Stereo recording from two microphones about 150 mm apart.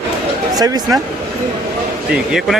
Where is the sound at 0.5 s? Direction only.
25° right (ahead or behind).